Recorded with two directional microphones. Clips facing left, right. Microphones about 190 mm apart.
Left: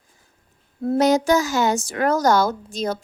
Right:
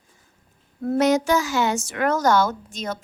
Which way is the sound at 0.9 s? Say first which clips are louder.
Left 2 dB; 35° left (ahead or behind).